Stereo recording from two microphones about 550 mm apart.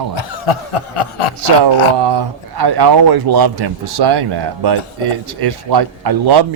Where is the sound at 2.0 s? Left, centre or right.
Right.